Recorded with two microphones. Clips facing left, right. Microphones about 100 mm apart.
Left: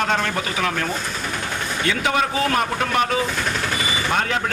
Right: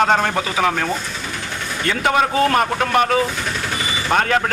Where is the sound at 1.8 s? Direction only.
45° right (ahead or behind).